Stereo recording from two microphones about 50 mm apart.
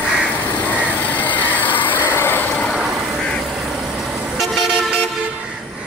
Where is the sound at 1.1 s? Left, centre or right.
Left.